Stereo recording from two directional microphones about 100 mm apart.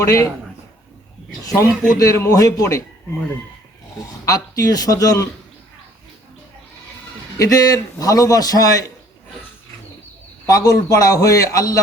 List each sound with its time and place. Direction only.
0.0 s a man's voice: 30° left (ahead or behind)
1.5 s a man's voice: 30° left (ahead or behind)
4.3 s a man's voice: 40° left (ahead or behind)
7.3 s a man's voice: 35° left (ahead or behind)
10.4 s a man's voice: 35° left (ahead or behind)